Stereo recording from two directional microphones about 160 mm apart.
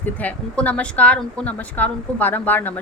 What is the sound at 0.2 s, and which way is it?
A woman's voice, 10° left (ahead or behind).